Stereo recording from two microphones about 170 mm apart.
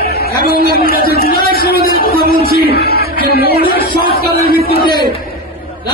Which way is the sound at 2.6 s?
65° left (ahead or behind).